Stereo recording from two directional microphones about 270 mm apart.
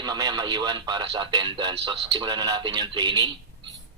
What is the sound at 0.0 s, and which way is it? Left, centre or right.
A man's voice, centre.